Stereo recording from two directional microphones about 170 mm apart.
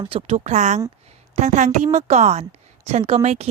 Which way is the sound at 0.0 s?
30° right (ahead or behind).